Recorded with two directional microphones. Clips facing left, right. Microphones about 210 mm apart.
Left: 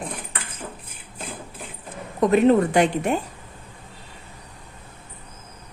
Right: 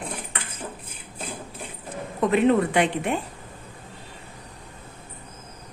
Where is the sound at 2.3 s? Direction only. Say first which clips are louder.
Left 3 dB; 40° left (ahead or behind).